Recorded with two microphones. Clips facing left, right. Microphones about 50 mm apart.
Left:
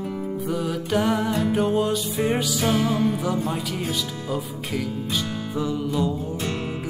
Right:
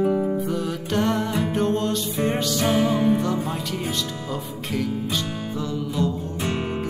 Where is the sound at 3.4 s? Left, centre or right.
Centre.